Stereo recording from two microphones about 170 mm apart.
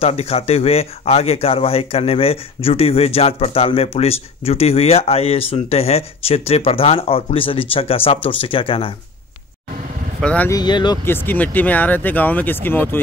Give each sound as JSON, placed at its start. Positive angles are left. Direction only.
{"t": 0.0, "sound": "speech", "side_deg": 35}
{"t": 10.2, "sound": "speech", "side_deg": 10}
{"t": 10.5, "sound": "speech", "side_deg": 25}
{"t": 11.1, "sound": "speech", "side_deg": 10}